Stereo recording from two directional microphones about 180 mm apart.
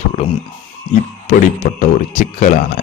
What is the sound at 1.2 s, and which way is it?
Speech, 45° left (ahead or behind).